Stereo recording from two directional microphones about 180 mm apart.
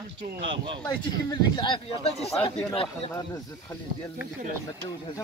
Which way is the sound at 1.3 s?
25° left (ahead or behind).